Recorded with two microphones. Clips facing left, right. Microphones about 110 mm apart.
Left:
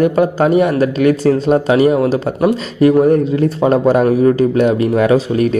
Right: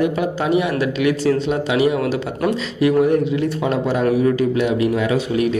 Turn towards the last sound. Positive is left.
turn(degrees=45)  # may be behind; listen again after turning